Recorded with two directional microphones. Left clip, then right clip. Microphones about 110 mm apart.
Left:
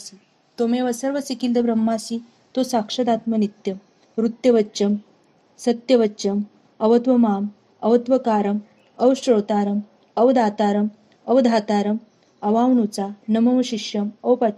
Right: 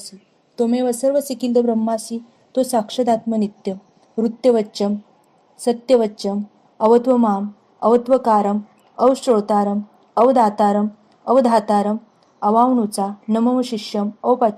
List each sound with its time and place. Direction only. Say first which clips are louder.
0.5 s a woman's voice: right 3 dB; 20° right (ahead or behind)
2.5 s a woman's voice: right 3 dB; 15° right (ahead or behind)